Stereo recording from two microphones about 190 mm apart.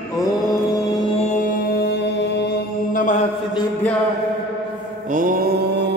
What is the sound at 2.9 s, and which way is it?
Mantra, 45° left (ahead or behind).